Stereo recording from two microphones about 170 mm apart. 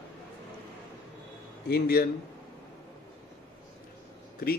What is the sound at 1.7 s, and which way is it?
Speech, 65° left (ahead or behind).